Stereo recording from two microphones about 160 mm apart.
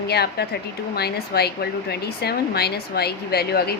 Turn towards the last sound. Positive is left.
turn(degrees=80)